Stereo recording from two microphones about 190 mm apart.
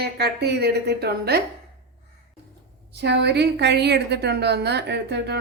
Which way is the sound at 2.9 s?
65° right (ahead or behind).